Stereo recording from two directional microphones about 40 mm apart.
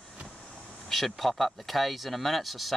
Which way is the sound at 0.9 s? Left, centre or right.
Centre.